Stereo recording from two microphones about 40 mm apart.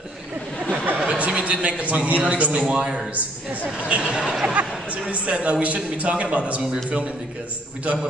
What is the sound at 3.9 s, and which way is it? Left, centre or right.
Speech, right.